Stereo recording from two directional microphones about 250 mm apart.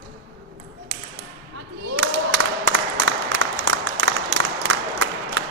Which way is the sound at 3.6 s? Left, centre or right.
Right.